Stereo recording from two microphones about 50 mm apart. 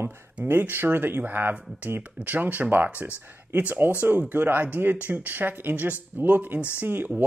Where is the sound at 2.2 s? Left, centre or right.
Right.